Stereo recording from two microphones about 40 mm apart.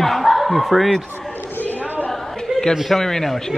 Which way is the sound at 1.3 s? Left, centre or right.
Left.